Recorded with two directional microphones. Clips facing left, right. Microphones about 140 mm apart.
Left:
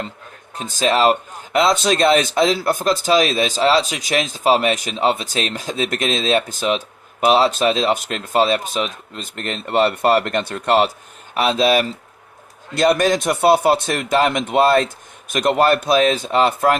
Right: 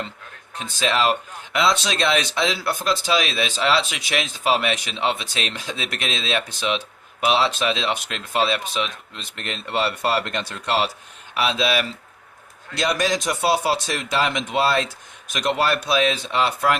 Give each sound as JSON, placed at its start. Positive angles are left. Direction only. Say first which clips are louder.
{"t": 0.5, "sound": "speech", "louder": "left 5 dB", "side_deg": 40}